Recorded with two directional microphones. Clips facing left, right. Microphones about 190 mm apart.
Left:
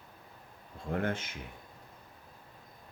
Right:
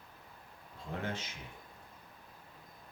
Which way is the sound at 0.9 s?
55° left (ahead or behind).